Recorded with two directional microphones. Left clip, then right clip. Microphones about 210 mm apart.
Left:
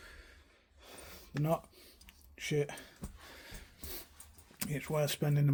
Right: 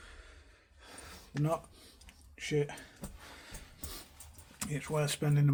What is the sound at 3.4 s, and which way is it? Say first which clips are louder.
Music: right 1 dB; 40° left (ahead or behind).